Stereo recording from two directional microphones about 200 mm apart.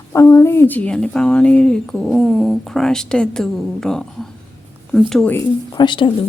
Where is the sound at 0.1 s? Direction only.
15° left (ahead or behind).